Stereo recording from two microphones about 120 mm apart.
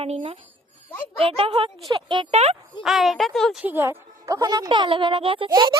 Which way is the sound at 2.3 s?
60° right (ahead or behind).